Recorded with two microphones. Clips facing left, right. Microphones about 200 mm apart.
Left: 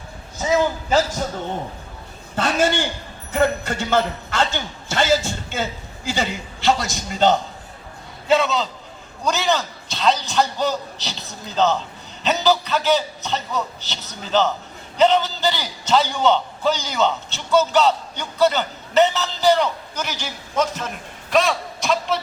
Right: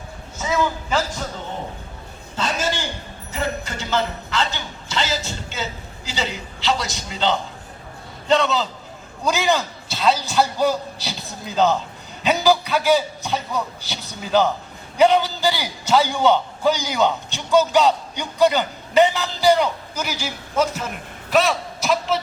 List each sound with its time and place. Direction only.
0.3 s a woman's voice: 35° left (ahead or behind)
2.3 s a man's voice: 60° left (ahead or behind)
8.3 s a man's voice: centre (ahead or behind)
9.2 s a man's voice: 10° right (ahead or behind)